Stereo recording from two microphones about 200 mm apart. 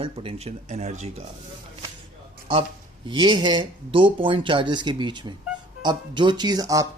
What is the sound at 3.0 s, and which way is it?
Speech, 20° right (ahead or behind).